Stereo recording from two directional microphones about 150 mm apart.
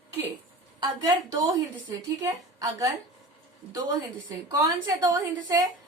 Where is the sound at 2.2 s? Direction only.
20° right (ahead or behind).